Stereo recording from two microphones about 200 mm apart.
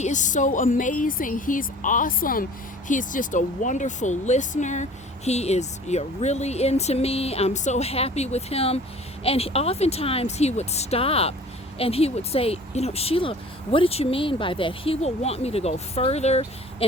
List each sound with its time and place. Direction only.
0.0 s speech: 40° left (ahead or behind)